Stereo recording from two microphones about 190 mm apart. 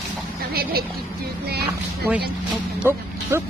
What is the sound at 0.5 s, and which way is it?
Speech, 55° right (ahead or behind).